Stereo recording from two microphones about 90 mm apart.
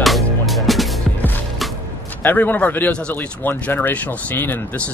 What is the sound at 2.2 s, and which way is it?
Speech, 20° left (ahead or behind).